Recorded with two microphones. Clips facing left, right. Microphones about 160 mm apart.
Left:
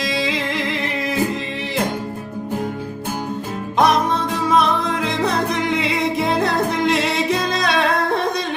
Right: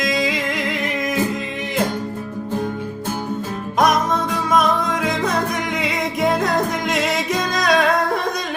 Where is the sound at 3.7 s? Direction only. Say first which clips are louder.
Left 1 dB; 30° left (ahead or behind).